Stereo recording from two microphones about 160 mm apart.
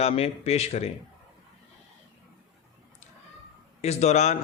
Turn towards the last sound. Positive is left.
turn(degrees=45)  # may be behind; listen again after turning